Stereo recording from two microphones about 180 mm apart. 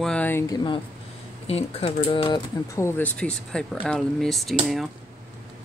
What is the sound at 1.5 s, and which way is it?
Speech, 35° left (ahead or behind).